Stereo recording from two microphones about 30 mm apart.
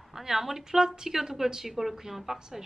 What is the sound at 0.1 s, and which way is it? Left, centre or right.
Speech, centre.